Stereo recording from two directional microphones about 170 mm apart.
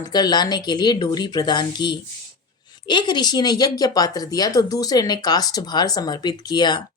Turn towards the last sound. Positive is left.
turn(degrees=25)  # may be behind; listen again after turning